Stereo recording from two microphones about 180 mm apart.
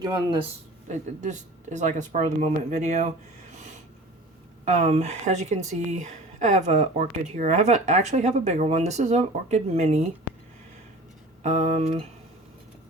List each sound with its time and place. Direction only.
0.0 s speech: 25° right (ahead or behind)
0.9 s speech: 40° right (ahead or behind)
3.5 s snort: 40° right (ahead or behind)
4.6 s speech: 40° right (ahead or behind)
11.4 s speech: 40° right (ahead or behind)